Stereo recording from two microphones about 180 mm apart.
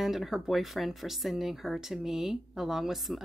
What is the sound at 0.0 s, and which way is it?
Speech, centre (ahead or behind).